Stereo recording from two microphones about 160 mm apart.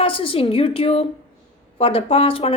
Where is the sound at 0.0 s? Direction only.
35° left (ahead or behind).